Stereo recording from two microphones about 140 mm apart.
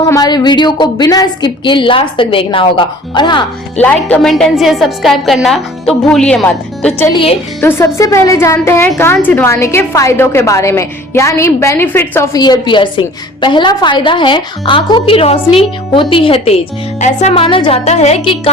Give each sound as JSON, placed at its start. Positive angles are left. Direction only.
{"t": 0.1, "sound": "a woman's voice", "side_deg": 30}
{"t": 3.8, "sound": "a woman's voice", "side_deg": 10}
{"t": 7.1, "sound": "a woman's voice", "side_deg": 40}
{"t": 7.6, "sound": "a woman's voice", "side_deg": 20}
{"t": 17.0, "sound": "music", "side_deg": 55}
{"t": 17.3, "sound": "a woman's voice", "side_deg": 40}
{"t": 17.8, "sound": "speech", "side_deg": 50}